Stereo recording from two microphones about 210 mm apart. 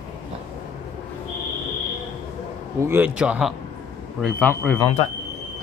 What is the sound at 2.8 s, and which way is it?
Speech, 10° right (ahead or behind).